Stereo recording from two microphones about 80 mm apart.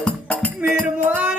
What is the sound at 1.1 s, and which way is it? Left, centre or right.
Music, centre.